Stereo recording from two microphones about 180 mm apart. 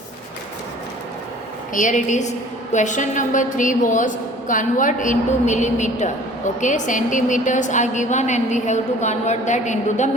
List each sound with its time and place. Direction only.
1.7 s a woman's voice: 45° left (ahead or behind)